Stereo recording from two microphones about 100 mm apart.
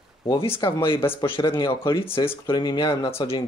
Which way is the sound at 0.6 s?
45° left (ahead or behind).